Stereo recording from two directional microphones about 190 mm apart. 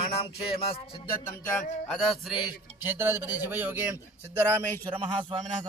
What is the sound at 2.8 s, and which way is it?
A man's voice, 10° right (ahead or behind).